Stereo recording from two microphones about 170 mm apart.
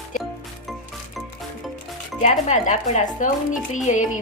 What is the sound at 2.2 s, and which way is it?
Speech, 45° left (ahead or behind).